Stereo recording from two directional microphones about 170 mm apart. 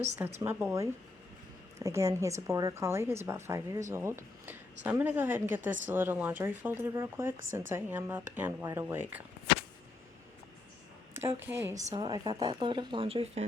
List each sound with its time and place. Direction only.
0.4 s speech: 15° right (ahead or behind)
11.4 s speech: 15° right (ahead or behind)
11.9 s speech: 25° right (ahead or behind)